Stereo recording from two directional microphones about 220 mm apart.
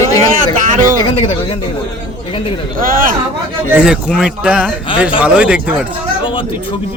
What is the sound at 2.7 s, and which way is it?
Speech, 40° right (ahead or behind).